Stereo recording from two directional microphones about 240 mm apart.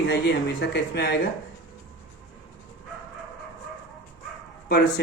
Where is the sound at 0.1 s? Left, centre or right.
Left.